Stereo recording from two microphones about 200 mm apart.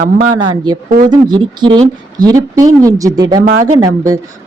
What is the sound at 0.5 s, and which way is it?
Speech, 20° right (ahead or behind).